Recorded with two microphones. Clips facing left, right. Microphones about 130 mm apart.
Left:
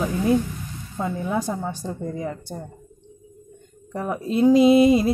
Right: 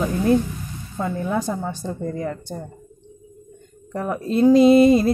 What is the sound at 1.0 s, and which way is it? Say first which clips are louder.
Speech: right 1 dB; 5° left (ahead or behind).